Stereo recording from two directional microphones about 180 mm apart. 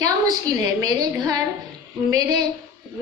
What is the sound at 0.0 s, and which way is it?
A woman's voice, 20° right (ahead or behind).